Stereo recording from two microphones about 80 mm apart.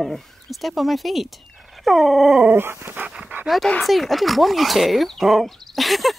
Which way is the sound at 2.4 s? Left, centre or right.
Right.